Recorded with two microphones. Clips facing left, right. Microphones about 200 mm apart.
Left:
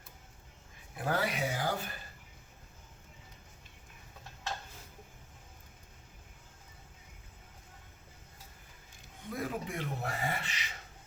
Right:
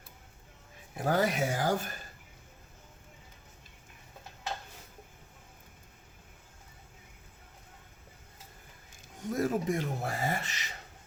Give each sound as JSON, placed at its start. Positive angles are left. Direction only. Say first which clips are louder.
{"t": 0.9, "sound": "speech", "louder": "right 5 dB", "side_deg": -45}
{"t": 9.3, "sound": "speech", "louder": "right 8 dB", "side_deg": -45}